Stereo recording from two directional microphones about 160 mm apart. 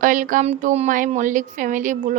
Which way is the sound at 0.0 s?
55° right (ahead or behind).